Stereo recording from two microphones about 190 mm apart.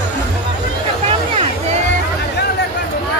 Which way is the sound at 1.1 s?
30° right (ahead or behind).